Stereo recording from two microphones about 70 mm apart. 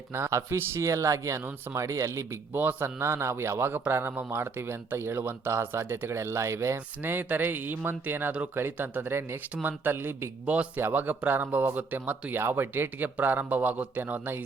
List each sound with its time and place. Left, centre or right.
0.1 s speech: right
2.6 s speech: right
3.0 s speech: right
7.0 s speech: right
10.4 s speech: centre
10.8 s speech: right